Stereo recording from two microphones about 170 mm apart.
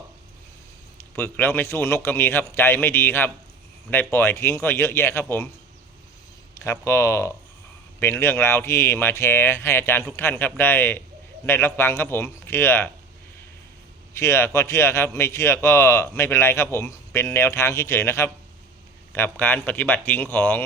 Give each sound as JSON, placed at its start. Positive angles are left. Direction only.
{"t": 0.9, "sound": "a man's voice", "side_deg": 15}
{"t": 6.5, "sound": "a man's voice", "side_deg": 15}
{"t": 14.1, "sound": "a man's voice", "side_deg": 15}